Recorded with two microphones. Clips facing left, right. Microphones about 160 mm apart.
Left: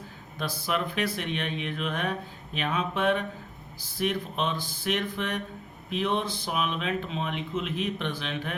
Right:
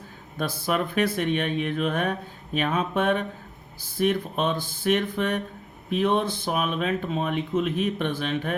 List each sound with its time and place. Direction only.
0.3 s speech: 50° right (ahead or behind)